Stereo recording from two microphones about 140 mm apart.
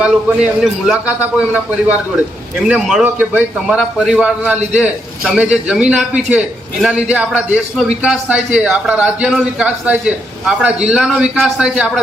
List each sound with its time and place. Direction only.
0.0 s a man's voice: 5° right (ahead or behind)
2.6 s a man's voice: 5° right (ahead or behind)